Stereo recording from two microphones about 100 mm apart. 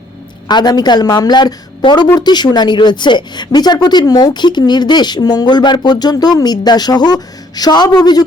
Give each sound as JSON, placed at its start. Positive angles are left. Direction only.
{"t": 0.4, "sound": "speech", "side_deg": 45}